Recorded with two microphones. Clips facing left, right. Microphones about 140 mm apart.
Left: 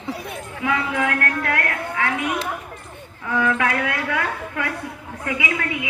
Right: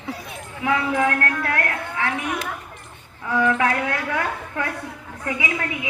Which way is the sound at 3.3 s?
20° right (ahead or behind).